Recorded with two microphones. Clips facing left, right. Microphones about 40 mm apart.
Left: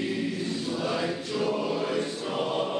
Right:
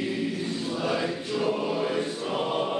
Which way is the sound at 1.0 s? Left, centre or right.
Centre.